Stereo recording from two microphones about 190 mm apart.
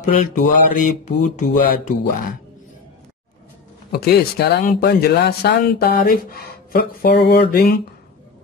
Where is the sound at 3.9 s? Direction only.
55° left (ahead or behind).